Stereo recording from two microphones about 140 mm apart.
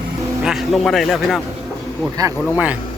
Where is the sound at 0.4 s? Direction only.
Centre (ahead or behind).